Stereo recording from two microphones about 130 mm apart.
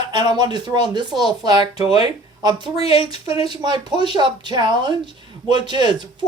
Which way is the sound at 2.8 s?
50° left (ahead or behind).